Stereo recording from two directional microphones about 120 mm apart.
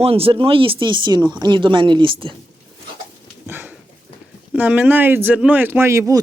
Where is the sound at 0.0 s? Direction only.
55° right (ahead or behind).